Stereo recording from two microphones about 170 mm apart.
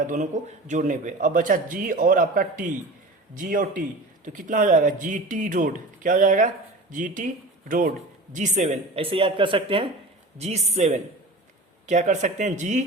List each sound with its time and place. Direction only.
0.0 s a man's voice: 50° right (ahead or behind)